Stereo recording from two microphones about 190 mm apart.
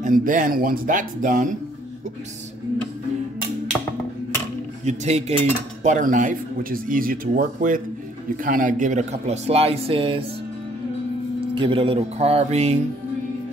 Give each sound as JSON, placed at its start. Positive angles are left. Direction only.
{"t": 0.0, "sound": "speech", "side_deg": -45}
{"t": 4.8, "sound": "a man's voice", "side_deg": -35}
{"t": 11.5, "sound": "a man's voice", "side_deg": -30}